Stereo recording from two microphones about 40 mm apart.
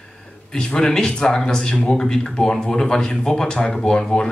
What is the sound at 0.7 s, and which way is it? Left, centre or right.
Speech, centre.